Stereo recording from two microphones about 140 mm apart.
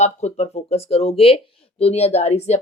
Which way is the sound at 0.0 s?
55° left (ahead or behind).